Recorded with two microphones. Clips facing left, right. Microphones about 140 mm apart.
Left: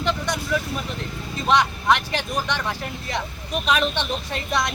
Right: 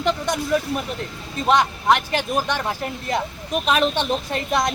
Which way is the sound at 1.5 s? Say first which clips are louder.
Right 2 dB; 45° right (ahead or behind).